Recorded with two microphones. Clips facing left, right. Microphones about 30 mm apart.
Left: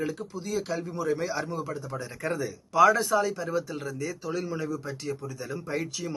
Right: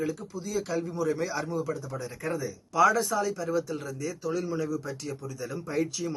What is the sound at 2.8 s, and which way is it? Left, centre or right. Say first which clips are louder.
Speech: left 2 dB; centre.